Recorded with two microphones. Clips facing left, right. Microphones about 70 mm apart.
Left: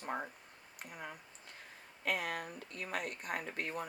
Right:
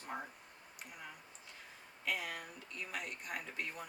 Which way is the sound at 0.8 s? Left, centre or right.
Left.